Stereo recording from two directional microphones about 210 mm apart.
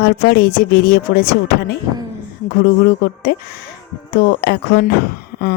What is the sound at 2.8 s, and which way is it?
A woman's voice, 50° left (ahead or behind).